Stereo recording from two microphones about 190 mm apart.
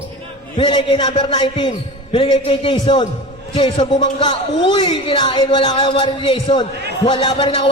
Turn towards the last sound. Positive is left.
turn(degrees=25)  # may be behind; listen again after turning